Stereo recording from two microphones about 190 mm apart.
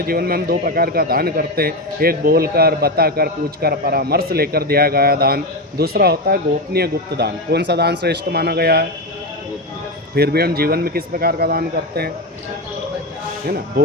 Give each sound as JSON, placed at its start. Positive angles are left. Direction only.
{"t": 0.1, "sound": "a man's voice", "side_deg": -50}
{"t": 10.2, "sound": "a man's voice", "side_deg": -55}